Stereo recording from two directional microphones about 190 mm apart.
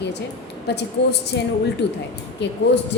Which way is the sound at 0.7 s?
60° left (ahead or behind).